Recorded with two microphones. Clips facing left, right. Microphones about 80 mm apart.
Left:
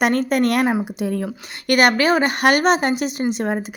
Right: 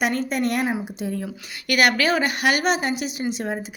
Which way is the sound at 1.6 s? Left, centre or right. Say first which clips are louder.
Left 4 dB; left.